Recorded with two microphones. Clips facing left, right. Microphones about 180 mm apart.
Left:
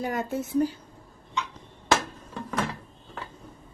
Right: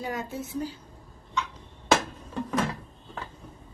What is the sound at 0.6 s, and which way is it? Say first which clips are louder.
Speech: left 10 dB; 55° left (ahead or behind).